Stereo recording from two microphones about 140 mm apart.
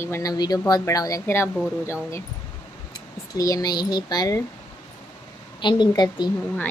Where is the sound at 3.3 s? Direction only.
25° left (ahead or behind).